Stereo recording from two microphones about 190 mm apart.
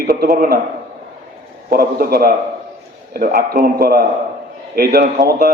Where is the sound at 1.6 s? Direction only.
50° right (ahead or behind).